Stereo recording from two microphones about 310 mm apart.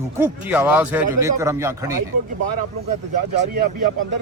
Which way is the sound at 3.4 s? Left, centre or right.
Right.